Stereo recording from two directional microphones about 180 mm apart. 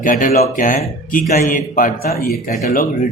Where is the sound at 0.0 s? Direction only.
50° left (ahead or behind).